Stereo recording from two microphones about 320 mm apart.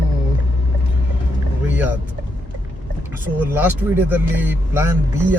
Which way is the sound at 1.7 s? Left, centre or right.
Centre.